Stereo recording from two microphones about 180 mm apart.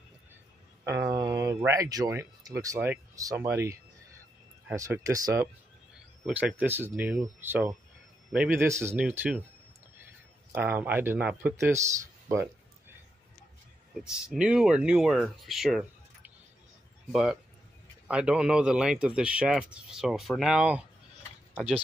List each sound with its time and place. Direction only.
1.1 s a sound: 20° right (ahead or behind)
1.7 s speech: 20° right (ahead or behind)
10.5 s speech: 10° right (ahead or behind)
14.2 s speech: 5° right (ahead or behind)
17.1 s speech: 5° right (ahead or behind)